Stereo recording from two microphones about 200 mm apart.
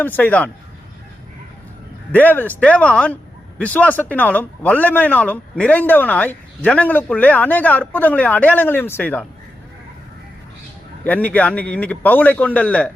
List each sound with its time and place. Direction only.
0.0 s speech: 10° left (ahead or behind)
2.1 s speech: 10° left (ahead or behind)
11.0 s speech: 10° left (ahead or behind)